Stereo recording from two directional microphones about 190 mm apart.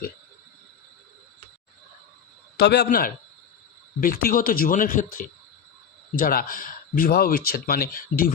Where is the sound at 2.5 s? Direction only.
60° left (ahead or behind); by 5.0 s 45° left (ahead or behind).